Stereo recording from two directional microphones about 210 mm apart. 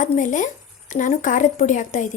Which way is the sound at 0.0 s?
35° left (ahead or behind).